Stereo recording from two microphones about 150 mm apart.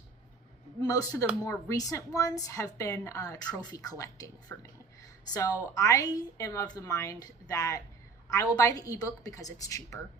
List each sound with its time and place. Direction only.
0.8 s a woman's voice: 25° left (ahead or behind)